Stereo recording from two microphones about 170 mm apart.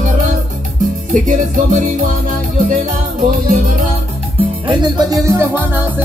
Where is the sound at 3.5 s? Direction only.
50° right (ahead or behind).